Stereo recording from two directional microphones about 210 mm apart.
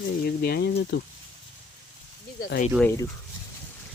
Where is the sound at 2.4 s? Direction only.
40° left (ahead or behind).